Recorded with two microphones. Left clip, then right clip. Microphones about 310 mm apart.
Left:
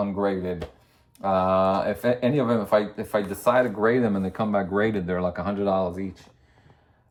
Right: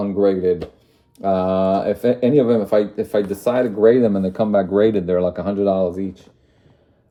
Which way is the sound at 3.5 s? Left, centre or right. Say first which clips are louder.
Right 10 dB; centre.